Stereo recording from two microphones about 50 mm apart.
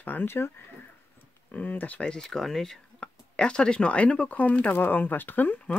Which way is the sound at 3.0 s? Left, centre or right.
Centre.